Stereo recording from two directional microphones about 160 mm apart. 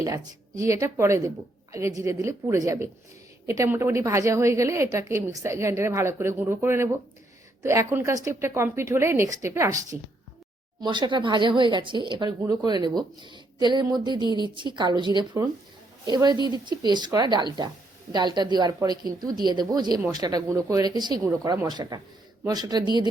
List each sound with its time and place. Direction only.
0.0 s a woman's voice: 20° right (ahead or behind)